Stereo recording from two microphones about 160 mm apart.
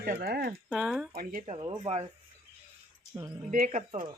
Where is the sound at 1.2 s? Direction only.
65° right (ahead or behind).